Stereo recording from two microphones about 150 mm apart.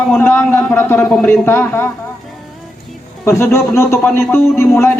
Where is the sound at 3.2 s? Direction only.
15° left (ahead or behind).